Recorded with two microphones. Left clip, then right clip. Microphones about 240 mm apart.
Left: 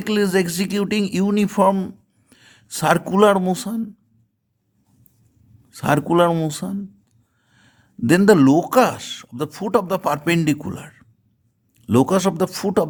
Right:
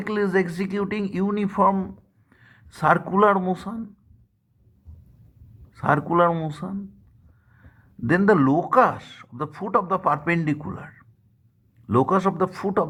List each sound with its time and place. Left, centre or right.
0.0 s speech: left
5.7 s speech: left